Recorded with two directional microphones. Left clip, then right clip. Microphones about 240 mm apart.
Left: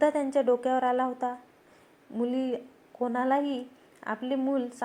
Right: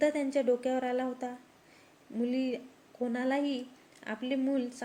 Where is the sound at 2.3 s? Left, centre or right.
Left.